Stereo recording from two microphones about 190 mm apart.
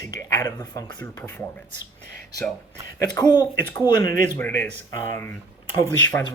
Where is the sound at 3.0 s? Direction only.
20° left (ahead or behind).